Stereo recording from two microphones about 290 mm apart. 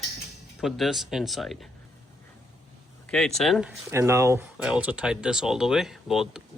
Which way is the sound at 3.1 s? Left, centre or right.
Centre.